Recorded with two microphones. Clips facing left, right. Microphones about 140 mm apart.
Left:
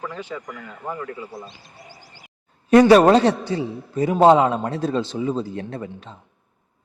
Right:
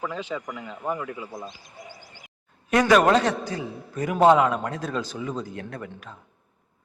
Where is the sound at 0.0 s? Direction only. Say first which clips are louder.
Right 1 dB; 15° right (ahead or behind).